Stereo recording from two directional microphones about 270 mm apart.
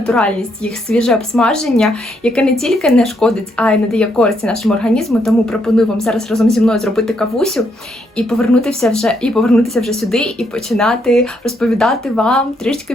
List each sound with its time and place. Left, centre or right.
0.0 s a woman's voice: centre